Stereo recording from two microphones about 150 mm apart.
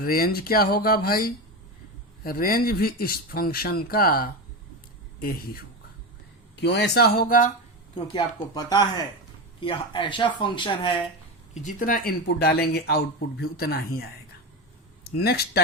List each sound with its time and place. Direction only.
0.0 s speech: 80° left
6.8 s speech: 90° left; by 7.5 s 65° left (ahead or behind)
7.9 s speech: 30° left (ahead or behind)
11.5 s speech: 60° left (ahead or behind); by 14.1 s 90° left
15.2 s speech: 90° left